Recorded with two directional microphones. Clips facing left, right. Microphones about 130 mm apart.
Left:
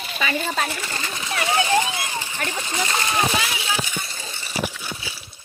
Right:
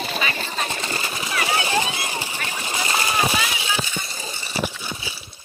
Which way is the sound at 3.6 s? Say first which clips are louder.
Even; centre (ahead or behind).